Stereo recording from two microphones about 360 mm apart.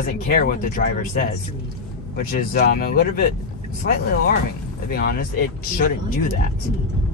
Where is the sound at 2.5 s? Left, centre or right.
Left.